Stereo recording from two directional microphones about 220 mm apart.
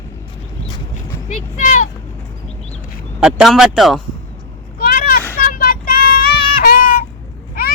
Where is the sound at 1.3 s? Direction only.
35° left (ahead or behind).